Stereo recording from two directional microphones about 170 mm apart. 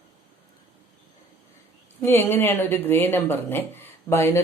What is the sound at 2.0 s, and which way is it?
Speech, 15° left (ahead or behind).